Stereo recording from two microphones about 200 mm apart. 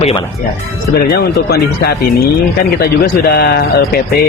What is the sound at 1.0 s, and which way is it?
Mantra, 50° left (ahead or behind).